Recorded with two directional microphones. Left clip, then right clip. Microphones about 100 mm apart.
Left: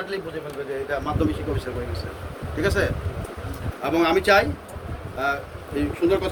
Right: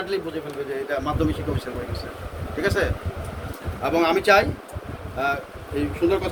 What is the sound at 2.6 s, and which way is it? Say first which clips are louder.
Speech: even; 10° left (ahead or behind).